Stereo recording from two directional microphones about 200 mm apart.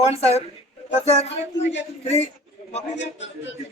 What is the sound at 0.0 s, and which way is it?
Speech, 30° left (ahead or behind).